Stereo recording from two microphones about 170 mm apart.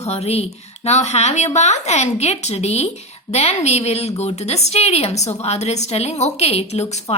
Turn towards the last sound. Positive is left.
turn(degrees=40)  # may be behind; listen again after turning